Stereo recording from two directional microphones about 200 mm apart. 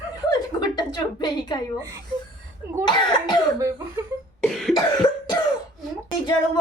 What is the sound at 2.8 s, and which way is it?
Speech, 20° left (ahead or behind).